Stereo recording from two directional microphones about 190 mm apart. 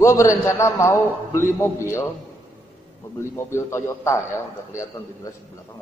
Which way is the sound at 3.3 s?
15° left (ahead or behind).